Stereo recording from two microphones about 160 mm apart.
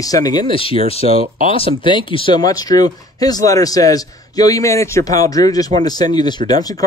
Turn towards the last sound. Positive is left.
turn(degrees=25)  # may be behind; listen again after turning